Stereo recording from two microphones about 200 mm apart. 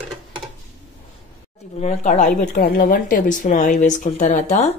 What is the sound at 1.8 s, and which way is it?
Speech, 40° left (ahead or behind).